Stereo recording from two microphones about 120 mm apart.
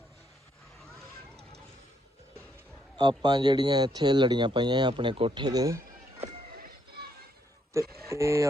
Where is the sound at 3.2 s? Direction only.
35° right (ahead or behind).